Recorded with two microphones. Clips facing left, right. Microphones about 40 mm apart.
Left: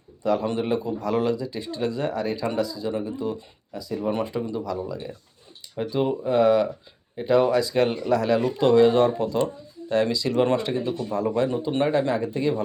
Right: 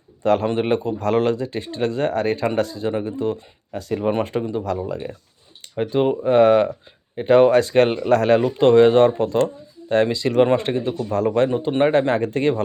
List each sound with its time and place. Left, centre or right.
0.2 s a man's voice: right
0.4 s speech: right
10.6 s speech: right
10.9 s speech: right
11.3 s speech: right